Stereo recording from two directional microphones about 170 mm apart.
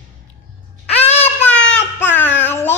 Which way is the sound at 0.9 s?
35° left (ahead or behind).